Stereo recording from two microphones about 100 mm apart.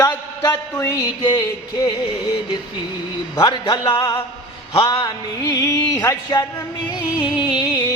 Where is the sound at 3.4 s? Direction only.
50° left (ahead or behind).